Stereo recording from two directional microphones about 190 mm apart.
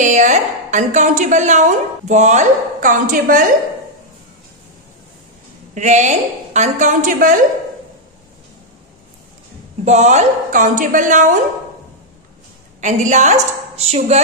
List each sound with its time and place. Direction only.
0.0 s a woman's voice: 40° right (ahead or behind)
5.8 s a woman's voice: 40° right (ahead or behind)
9.8 s a woman's voice: 35° right (ahead or behind)
12.8 s a woman's voice: 40° right (ahead or behind)